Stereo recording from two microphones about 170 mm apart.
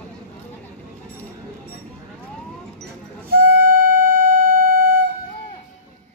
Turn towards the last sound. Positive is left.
turn(degrees=-55)  # may be behind; listen again after turning